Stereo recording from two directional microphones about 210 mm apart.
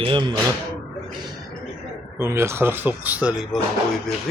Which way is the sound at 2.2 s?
10° right (ahead or behind).